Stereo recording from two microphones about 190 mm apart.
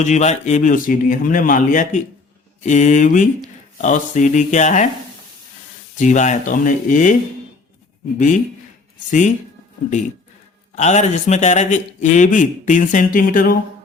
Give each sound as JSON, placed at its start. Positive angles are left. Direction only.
{"t": 0.0, "sound": "speech", "side_deg": 40}
{"t": 6.0, "sound": "speech", "side_deg": 40}
{"t": 9.0, "sound": "speech", "side_deg": 40}
{"t": 10.8, "sound": "speech", "side_deg": 35}